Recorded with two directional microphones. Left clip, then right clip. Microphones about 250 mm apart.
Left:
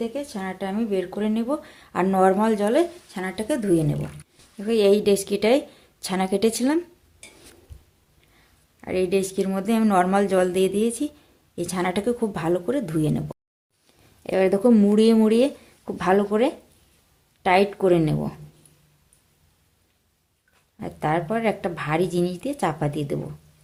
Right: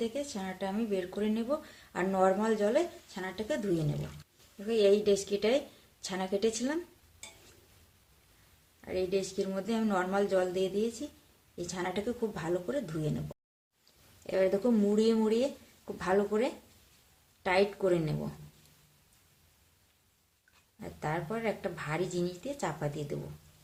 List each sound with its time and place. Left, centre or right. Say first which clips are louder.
0.0 s speech: left 6 dB; left
8.8 s speech: left 9 dB; left
14.3 s speech: left 9 dB; left
20.7 s speech: left 12 dB; left